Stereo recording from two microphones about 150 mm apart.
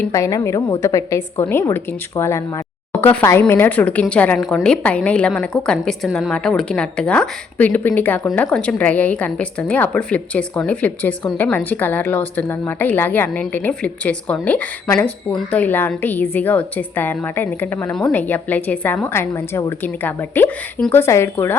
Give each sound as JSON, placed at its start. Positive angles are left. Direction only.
{"t": 0.0, "sound": "a woman's voice", "side_deg": 20}